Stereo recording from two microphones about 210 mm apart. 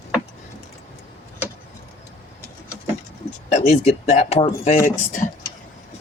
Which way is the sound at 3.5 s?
35° left (ahead or behind).